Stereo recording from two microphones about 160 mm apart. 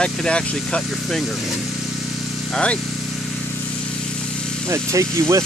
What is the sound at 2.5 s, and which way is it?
Speech, 5° left (ahead or behind).